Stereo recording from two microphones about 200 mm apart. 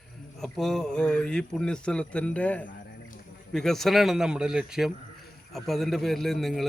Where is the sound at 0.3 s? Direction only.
Centre (ahead or behind).